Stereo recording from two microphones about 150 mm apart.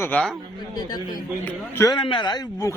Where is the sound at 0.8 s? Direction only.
25° left (ahead or behind).